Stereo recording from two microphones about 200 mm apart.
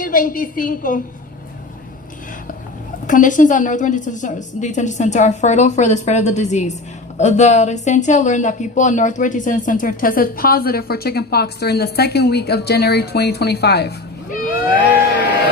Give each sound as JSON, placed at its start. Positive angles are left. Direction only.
{"t": 0.0, "sound": "a woman's voice", "side_deg": 45}
{"t": 3.1, "sound": "a woman's voice", "side_deg": 40}